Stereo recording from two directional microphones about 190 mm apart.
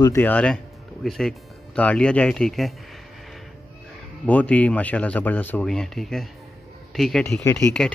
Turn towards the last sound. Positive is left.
turn(degrees=5)  # may be behind; listen again after turning